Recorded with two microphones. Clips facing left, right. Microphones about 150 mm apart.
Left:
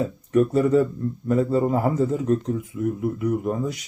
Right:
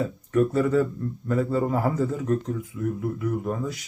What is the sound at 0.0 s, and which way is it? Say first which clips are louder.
A man's voice: left 2 dB; 20° left (ahead or behind).